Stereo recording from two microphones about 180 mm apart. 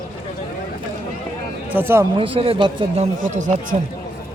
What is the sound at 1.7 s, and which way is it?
Speech, 15° right (ahead or behind).